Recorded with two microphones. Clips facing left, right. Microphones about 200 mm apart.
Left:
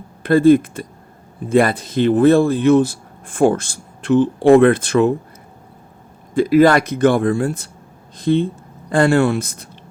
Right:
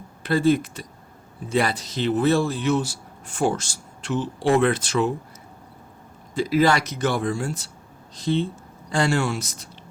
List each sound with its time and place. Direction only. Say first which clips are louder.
0.2 s speech: left 9 dB; 55° left (ahead or behind)
6.3 s speech: left 8 dB; 55° left (ahead or behind)